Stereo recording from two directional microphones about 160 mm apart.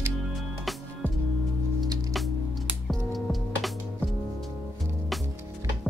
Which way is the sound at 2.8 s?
Centre (ahead or behind).